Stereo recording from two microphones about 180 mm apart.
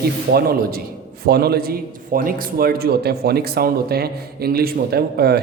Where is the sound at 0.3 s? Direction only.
55° right (ahead or behind).